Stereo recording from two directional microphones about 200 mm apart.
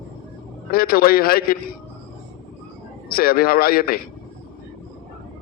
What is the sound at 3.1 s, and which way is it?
Speech, 50° left (ahead or behind).